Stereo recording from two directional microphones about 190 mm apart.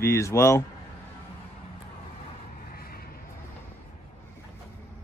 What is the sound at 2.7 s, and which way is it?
Vehicle, 50° left (ahead or behind).